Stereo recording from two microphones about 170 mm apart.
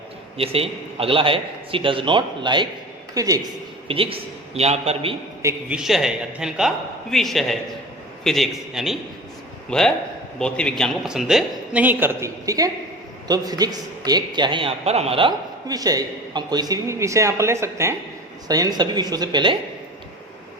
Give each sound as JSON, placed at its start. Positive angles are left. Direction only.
{"t": 0.3, "sound": "a man's voice", "side_deg": -35}
{"t": 3.8, "sound": "a man's voice", "side_deg": -35}
{"t": 5.4, "sound": "a man's voice", "side_deg": -15}
{"t": 5.7, "sound": "a woman's voice", "side_deg": 0}